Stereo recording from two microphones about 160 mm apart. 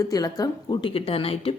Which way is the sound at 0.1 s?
20° left (ahead or behind).